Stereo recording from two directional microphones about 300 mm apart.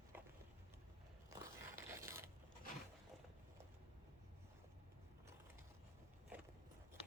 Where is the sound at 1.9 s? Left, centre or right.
Centre.